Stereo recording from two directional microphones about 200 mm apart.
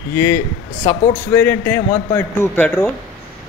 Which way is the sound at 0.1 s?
15° left (ahead or behind).